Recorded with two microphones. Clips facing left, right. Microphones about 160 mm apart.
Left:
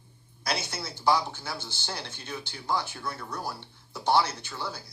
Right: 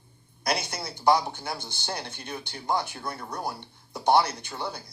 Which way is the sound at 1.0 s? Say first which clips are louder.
Right 3 dB; 55° right (ahead or behind).